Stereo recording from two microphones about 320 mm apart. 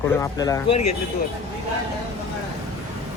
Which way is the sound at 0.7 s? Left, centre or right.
Left.